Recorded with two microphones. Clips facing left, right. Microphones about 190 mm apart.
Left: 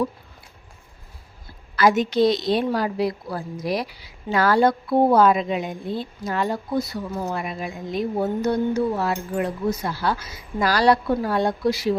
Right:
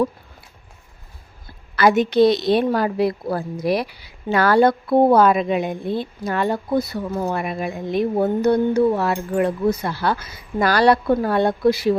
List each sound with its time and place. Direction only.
1.7 s a woman's voice: 60° right (ahead or behind)